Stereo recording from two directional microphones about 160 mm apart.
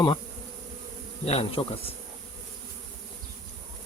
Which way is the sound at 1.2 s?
40° left (ahead or behind).